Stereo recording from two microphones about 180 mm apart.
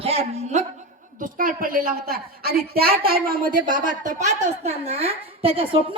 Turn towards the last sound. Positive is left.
turn(degrees=-30)  # may be behind; listen again after turning